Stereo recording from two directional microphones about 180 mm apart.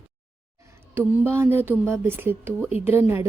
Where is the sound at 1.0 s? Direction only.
10° right (ahead or behind).